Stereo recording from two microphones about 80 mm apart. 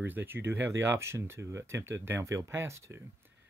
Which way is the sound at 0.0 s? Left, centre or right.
Right.